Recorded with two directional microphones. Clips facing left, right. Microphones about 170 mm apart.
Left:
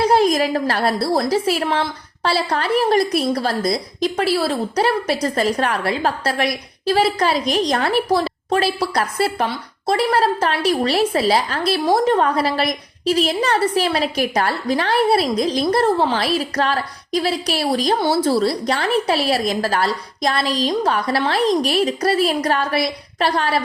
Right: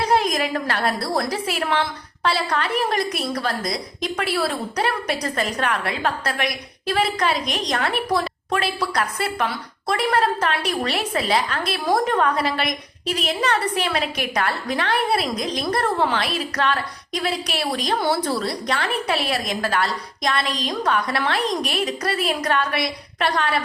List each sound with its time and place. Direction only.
0.0 s a woman's voice: 30° left (ahead or behind)